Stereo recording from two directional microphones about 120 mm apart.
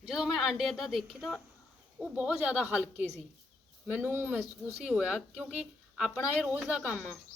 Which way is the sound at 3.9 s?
15° right (ahead or behind).